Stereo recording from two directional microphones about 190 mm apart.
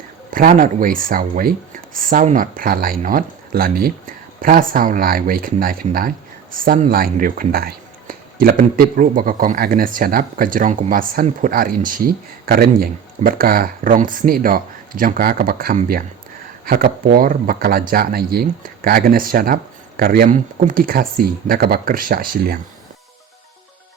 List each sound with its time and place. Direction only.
0.3 s speech: 45° right (ahead or behind)